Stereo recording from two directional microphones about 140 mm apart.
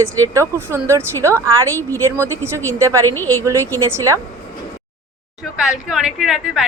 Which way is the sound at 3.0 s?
15° left (ahead or behind).